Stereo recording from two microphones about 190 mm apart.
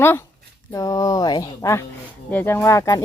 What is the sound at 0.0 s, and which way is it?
Speech, 10° left (ahead or behind).